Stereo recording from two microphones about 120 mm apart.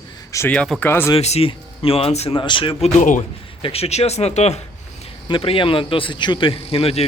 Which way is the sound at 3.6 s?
60° left (ahead or behind).